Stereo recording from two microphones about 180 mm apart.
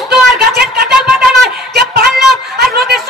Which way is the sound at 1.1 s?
Centre (ahead or behind).